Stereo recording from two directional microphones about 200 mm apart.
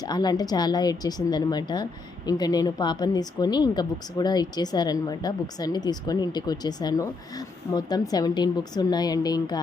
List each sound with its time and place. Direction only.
0.0 s a woman's voice: 20° left (ahead or behind)